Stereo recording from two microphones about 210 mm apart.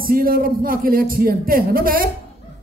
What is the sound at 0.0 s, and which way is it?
Speech, 45° right (ahead or behind).